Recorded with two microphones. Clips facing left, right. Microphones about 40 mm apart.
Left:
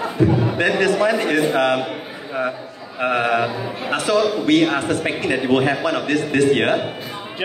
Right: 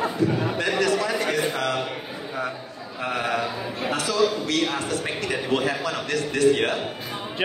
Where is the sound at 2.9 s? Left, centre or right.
Left.